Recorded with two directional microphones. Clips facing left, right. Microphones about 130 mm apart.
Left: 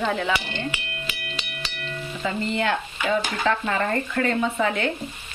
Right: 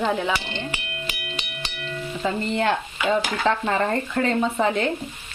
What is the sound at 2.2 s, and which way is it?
Frying, 35° right (ahead or behind).